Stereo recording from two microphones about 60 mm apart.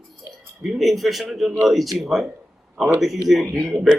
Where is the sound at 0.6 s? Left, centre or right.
Centre.